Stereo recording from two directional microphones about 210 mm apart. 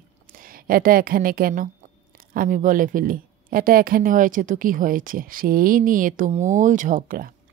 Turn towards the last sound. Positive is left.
turn(degrees=-40)  # may be behind; listen again after turning